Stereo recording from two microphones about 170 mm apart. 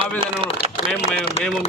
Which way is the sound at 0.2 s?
30° right (ahead or behind).